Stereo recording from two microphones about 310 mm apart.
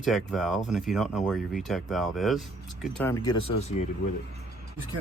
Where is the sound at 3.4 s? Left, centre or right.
Left.